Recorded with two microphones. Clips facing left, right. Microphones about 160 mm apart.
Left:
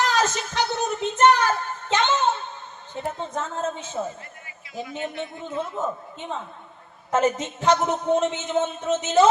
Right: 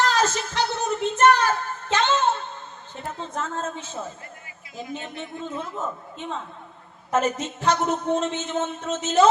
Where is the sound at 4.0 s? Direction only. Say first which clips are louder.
Left 6 dB; 15° left (ahead or behind).